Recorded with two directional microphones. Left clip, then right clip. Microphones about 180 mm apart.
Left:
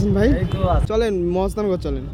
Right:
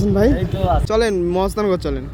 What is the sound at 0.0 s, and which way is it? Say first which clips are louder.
Speech: right 3 dB; 5° right (ahead or behind).